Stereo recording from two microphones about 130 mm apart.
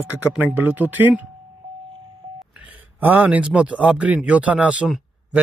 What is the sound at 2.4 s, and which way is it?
Speech, 10° right (ahead or behind).